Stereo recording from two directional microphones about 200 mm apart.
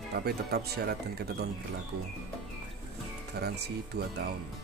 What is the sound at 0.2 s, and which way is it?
Speech, 55° right (ahead or behind).